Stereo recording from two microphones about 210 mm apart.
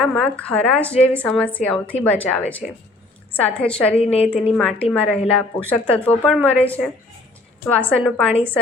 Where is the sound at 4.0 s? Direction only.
30° left (ahead or behind).